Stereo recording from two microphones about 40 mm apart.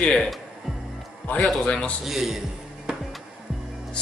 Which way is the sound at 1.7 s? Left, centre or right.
Left.